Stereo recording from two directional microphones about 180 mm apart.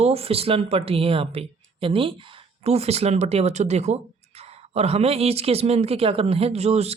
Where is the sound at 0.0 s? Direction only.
35° right (ahead or behind).